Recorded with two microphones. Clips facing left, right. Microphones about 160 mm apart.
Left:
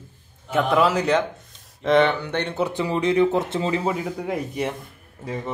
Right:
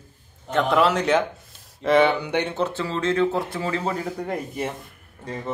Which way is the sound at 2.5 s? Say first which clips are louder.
Left 2 dB; 15° left (ahead or behind).